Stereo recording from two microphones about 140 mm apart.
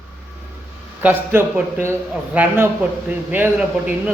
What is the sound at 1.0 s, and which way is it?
A man's voice, 15° right (ahead or behind).